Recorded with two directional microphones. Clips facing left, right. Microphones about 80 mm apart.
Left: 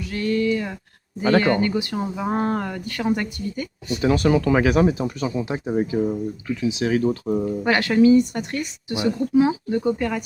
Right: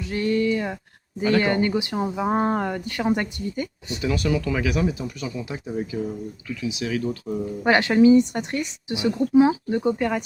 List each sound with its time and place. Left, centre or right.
0.0 s speech: right
4.0 s speech: left
7.6 s speech: right